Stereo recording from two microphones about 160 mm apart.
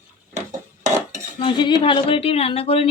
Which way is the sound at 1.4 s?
30° left (ahead or behind).